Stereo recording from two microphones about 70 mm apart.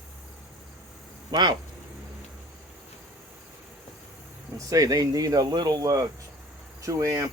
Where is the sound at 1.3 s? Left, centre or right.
Right.